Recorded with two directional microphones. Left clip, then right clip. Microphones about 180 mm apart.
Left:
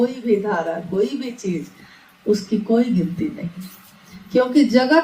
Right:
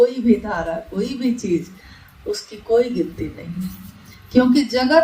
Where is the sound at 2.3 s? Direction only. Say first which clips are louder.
Right 1 dB; 45° right (ahead or behind).